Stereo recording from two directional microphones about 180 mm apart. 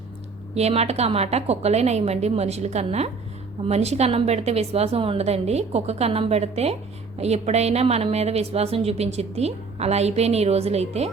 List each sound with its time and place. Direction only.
0.5 s a woman's voice: 35° right (ahead or behind)